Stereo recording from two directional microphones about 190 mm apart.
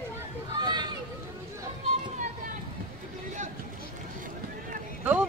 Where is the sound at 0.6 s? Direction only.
20° right (ahead or behind).